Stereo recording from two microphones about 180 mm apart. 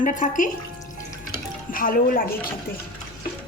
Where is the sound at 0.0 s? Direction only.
45° left (ahead or behind).